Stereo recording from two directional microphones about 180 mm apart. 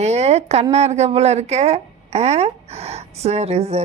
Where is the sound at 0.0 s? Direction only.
35° right (ahead or behind).